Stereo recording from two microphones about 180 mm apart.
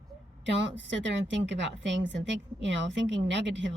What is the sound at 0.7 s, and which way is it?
A woman's voice, 90° right.